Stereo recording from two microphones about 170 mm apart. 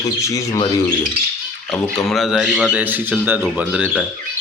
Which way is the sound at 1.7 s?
Centre (ahead or behind).